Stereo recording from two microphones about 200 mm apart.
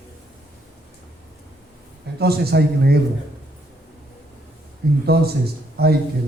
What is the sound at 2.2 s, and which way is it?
Speech, 55° right (ahead or behind).